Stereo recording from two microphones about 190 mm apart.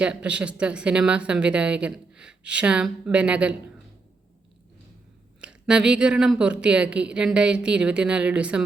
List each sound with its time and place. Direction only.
0.0 s speech: 5° right (ahead or behind)
5.4 s speech: 5° right (ahead or behind)